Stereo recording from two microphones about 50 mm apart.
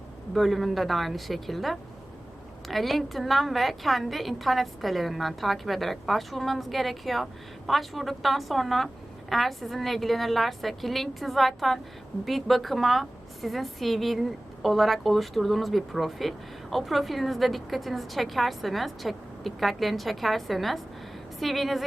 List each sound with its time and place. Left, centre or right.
0.3 s a woman's voice: centre